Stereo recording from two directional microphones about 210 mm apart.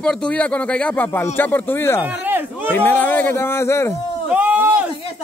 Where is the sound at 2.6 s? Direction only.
10° left (ahead or behind).